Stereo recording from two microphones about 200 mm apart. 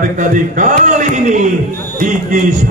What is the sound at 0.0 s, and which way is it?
A man's voice, 40° right (ahead or behind).